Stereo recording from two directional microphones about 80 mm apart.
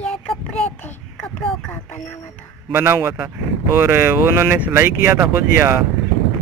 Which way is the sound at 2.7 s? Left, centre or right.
Right.